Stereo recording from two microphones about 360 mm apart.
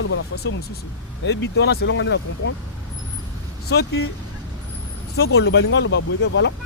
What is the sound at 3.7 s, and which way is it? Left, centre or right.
Speech, left.